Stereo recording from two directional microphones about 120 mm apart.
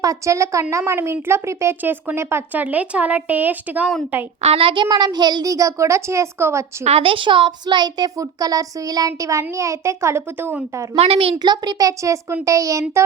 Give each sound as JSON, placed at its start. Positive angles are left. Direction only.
{"t": 0.0, "sound": "a child's voice", "side_deg": -25}
{"t": 4.4, "sound": "a child's voice", "side_deg": -50}
{"t": 6.8, "sound": "a child's voice", "side_deg": -55}
{"t": 10.9, "sound": "a child's voice", "side_deg": -55}
{"t": 11.4, "sound": "a child's voice", "side_deg": -35}